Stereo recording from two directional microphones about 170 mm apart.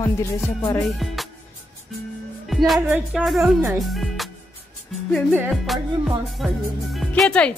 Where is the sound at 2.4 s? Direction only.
Centre (ahead or behind).